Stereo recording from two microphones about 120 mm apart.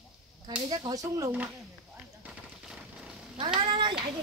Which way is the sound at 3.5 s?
40° right (ahead or behind).